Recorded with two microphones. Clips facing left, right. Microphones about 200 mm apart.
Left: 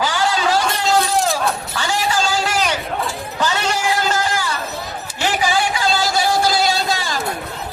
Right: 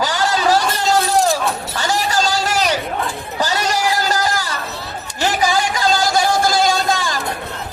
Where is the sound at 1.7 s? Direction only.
40° right (ahead or behind).